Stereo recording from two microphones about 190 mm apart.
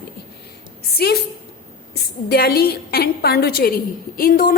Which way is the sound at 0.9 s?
55° left (ahead or behind).